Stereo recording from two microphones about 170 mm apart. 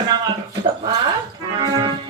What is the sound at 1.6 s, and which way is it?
Speech, 25° right (ahead or behind).